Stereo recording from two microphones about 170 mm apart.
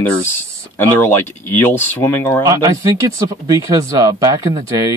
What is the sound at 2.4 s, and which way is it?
Speech, 20° right (ahead or behind).